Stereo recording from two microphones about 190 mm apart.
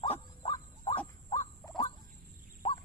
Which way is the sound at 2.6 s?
25° left (ahead or behind).